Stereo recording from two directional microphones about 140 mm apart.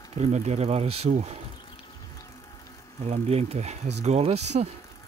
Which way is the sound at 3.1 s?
50° right (ahead or behind).